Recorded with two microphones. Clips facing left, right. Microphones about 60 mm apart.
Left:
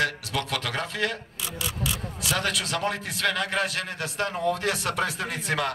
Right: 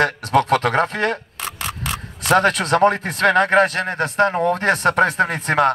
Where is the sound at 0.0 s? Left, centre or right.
Right.